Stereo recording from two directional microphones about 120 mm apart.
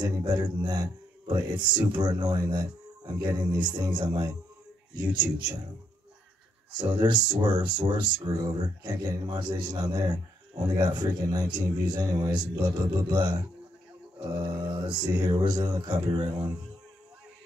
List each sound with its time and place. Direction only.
0.0 s speech: 35° right (ahead or behind)
6.8 s speech: 40° right (ahead or behind)
14.4 s speech: 35° right (ahead or behind)